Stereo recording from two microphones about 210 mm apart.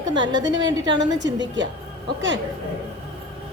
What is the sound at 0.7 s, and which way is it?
Speech, 20° right (ahead or behind).